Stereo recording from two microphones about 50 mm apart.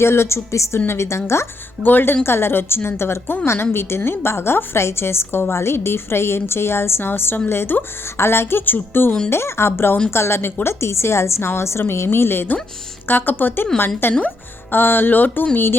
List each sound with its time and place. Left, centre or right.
0.0 s a woman's voice: left
0.9 s a woman's voice: left
1.8 s speech: left
2.2 s a woman's voice: left
9.3 s a woman's voice: left